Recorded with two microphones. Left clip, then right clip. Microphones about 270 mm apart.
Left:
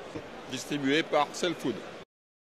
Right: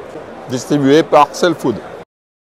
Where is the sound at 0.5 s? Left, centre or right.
Right.